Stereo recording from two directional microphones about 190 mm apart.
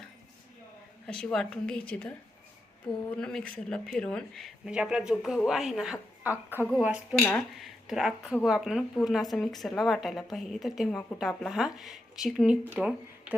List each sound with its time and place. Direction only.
1.0 s speech: 5° left (ahead or behind)